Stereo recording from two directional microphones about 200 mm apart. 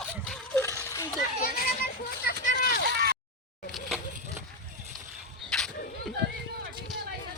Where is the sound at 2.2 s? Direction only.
45° left (ahead or behind).